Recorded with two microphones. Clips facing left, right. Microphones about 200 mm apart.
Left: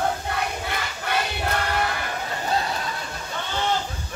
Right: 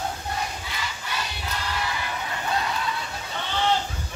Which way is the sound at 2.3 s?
40° left (ahead or behind).